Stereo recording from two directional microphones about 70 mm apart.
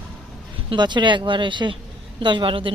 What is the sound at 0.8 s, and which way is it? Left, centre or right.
Speech, right.